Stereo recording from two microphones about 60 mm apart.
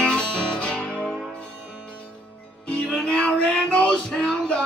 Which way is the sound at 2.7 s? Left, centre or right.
Centre.